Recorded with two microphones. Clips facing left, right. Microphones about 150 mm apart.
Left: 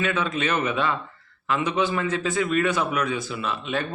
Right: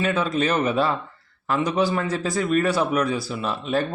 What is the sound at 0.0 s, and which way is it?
A man's voice, 35° right (ahead or behind).